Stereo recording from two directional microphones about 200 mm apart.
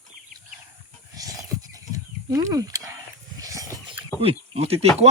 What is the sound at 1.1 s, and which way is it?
Wild animals, 20° right (ahead or behind).